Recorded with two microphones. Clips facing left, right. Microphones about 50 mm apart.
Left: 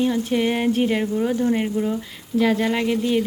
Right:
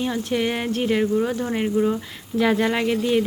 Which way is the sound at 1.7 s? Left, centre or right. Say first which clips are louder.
Right 3 dB; right.